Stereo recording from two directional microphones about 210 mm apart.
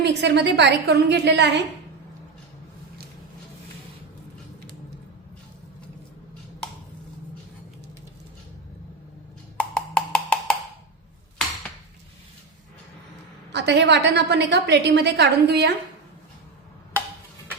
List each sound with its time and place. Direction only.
0.0 s a woman's voice: 55° right (ahead or behind)
9.6 s wood block: 5° left (ahead or behind)
13.5 s a woman's voice: 55° right (ahead or behind)